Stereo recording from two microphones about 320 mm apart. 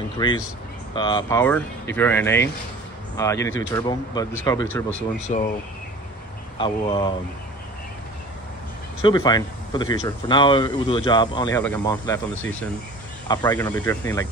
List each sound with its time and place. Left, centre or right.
0.2 s speech: centre
5.3 s speech: left
6.6 s speech: centre
9.0 s speech: centre
13.3 s speech: centre